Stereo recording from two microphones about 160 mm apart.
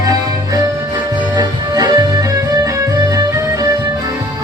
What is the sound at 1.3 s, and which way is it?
Music, 25° right (ahead or behind).